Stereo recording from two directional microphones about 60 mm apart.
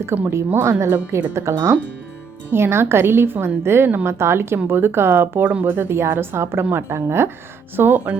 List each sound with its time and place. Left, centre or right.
0.3 s a woman's voice: right
5.5 s a woman's voice: right
7.8 s speech: right